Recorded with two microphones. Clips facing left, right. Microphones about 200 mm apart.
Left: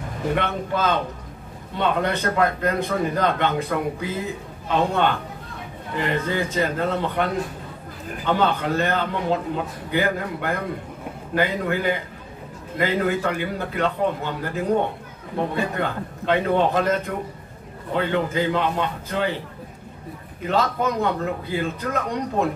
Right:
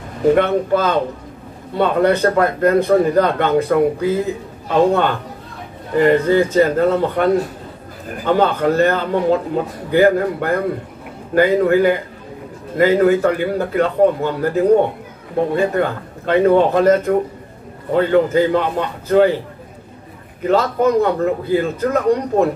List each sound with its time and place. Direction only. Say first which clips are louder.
0.3 s a man's voice: right 11 dB; 45° right (ahead or behind)
15.5 s a man's voice: right 8 dB; 45° right (ahead or behind)
20.4 s a man's voice: right 7 dB; 45° right (ahead or behind)